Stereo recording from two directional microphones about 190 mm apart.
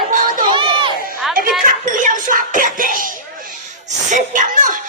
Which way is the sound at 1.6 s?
45° right (ahead or behind).